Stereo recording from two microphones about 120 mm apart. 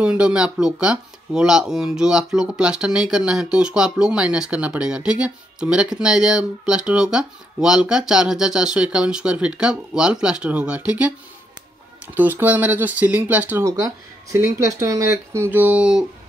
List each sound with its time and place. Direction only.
0.0 s speech: 10° right (ahead or behind)
13.7 s speech: 30° right (ahead or behind); by 16.1 s 5° right (ahead or behind)